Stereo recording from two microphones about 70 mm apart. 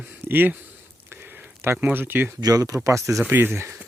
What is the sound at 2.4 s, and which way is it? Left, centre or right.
Speech, right.